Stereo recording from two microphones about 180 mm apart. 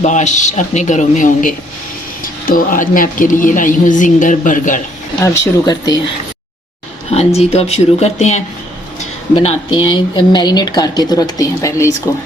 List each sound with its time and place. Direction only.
0.0 s a woman's voice: 40° left (ahead or behind)
5.2 s speech: 20° left (ahead or behind)
7.1 s speech: 35° left (ahead or behind); by 11.9 s 15° left (ahead or behind)